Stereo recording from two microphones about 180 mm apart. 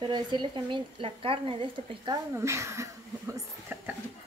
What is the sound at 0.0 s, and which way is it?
A woman's voice, 25° right (ahead or behind).